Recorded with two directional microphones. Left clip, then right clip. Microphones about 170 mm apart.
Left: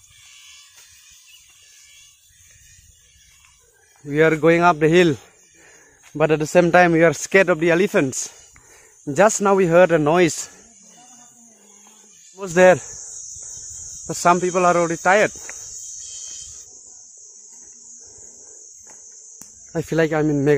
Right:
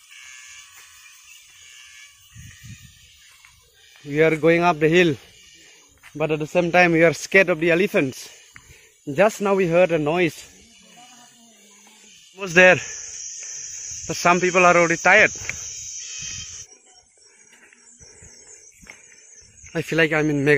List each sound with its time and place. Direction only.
4.1 s speech: 15° left (ahead or behind)
6.1 s speech: 35° left (ahead or behind)
6.9 s speech: 15° left (ahead or behind); by 10.3 s 30° left (ahead or behind)
12.4 s speech: 5° left (ahead or behind)
14.0 s speech: 5° left (ahead or behind)
15.3 s speech: 15° right (ahead or behind)
19.7 s speech: 20° left (ahead or behind)